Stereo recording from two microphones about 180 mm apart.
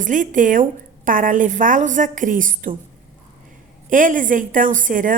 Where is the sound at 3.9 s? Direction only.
45° right (ahead or behind).